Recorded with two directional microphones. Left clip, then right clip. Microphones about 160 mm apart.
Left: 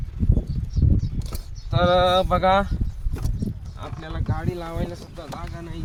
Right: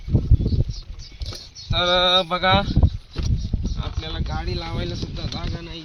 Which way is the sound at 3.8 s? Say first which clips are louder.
Right 1 dB; 30° left (ahead or behind).